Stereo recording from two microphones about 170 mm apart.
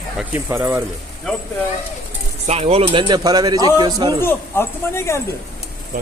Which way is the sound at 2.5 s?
40° right (ahead or behind).